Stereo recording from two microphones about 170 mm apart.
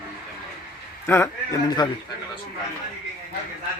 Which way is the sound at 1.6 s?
25° left (ahead or behind).